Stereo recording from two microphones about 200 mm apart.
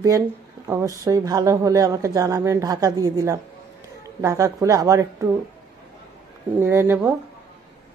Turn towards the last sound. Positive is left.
turn(degrees=-10)  # may be behind; listen again after turning